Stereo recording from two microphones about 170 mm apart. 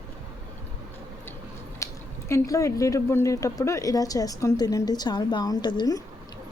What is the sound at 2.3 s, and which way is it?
Speech, 20° left (ahead or behind).